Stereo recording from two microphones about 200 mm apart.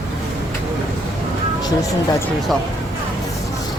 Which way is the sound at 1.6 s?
15° left (ahead or behind).